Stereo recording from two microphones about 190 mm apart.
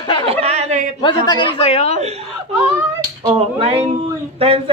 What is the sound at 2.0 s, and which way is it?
A man's voice, 35° right (ahead or behind).